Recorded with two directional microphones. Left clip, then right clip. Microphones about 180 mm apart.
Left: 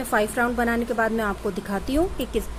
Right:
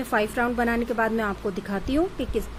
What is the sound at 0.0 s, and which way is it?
A woman's voice, 10° right (ahead or behind).